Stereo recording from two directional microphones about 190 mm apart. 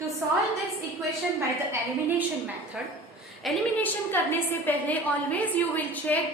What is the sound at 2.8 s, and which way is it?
Speech, 5° right (ahead or behind).